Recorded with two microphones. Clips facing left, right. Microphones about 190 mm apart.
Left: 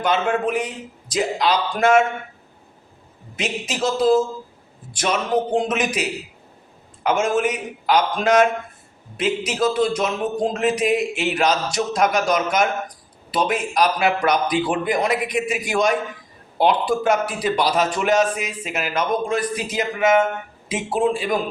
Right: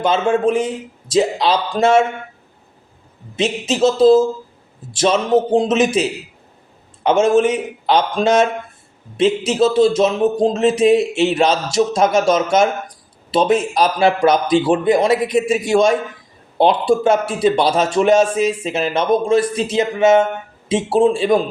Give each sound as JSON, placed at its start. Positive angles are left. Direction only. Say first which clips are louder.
{"t": 0.0, "sound": "a man's voice", "louder": "right 5 dB", "side_deg": -25}
{"t": 3.3, "sound": "a man's voice", "louder": "right 7 dB", "side_deg": -25}